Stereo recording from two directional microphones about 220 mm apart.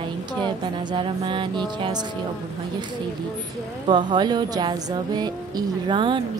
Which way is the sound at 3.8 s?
20° right (ahead or behind).